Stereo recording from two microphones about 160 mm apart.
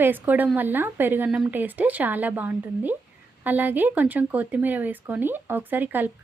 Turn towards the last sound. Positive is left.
turn(degrees=-10)  # may be behind; listen again after turning